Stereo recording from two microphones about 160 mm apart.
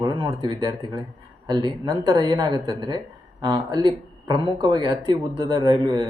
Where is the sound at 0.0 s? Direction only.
25° right (ahead or behind).